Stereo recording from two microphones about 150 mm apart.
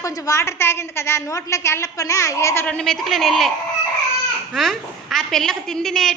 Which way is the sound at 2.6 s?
5° left (ahead or behind).